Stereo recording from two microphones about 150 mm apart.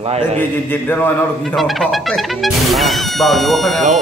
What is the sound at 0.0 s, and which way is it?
Speech, 45° right (ahead or behind).